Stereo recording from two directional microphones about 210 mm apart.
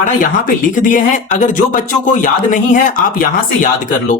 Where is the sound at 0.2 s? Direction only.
40° left (ahead or behind).